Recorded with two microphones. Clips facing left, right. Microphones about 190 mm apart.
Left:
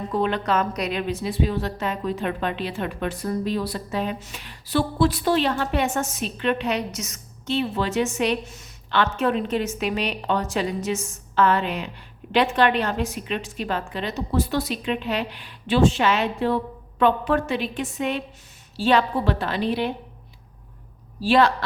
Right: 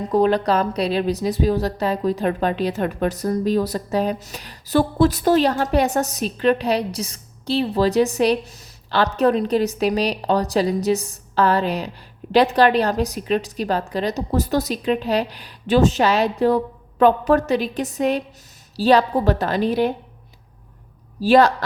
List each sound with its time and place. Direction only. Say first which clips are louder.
0.1 s a woman's voice: right 6 dB; 40° right (ahead or behind)
21.2 s a woman's voice: right 4 dB; 40° right (ahead or behind)